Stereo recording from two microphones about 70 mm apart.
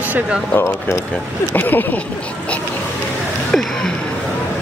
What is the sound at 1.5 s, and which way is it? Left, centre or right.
Speech, left.